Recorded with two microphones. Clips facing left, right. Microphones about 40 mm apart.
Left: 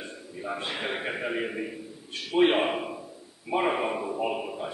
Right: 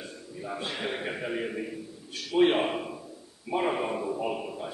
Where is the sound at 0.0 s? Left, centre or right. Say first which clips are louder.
Left 2 dB; left.